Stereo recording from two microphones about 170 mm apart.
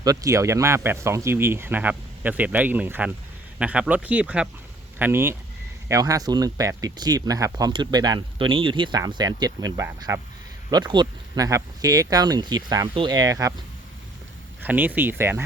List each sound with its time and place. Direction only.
0.0 s speech: 20° right (ahead or behind)
14.6 s speech: 10° right (ahead or behind)